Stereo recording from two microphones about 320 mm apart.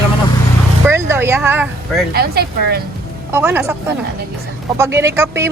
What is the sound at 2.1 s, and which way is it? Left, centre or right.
Speech, right.